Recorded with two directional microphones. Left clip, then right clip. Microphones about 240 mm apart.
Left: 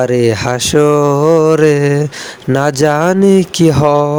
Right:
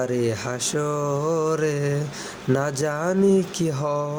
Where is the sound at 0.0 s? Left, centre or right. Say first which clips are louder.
Left 12 dB; left.